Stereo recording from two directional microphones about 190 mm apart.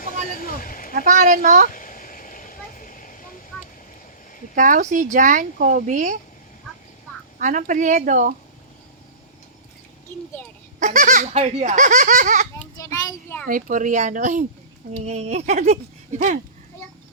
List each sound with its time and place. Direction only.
0.0 s a sound: 45° left (ahead or behind)
0.9 s speech: 45° right (ahead or behind)
1.6 s vehicle: 45° left (ahead or behind)
4.5 s speech: 45° right (ahead or behind)
7.3 s speech: 45° right (ahead or behind)
10.8 s speech: 40° right (ahead or behind)
12.7 s child singing: 15° left (ahead or behind)
13.5 s speech: 45° right (ahead or behind)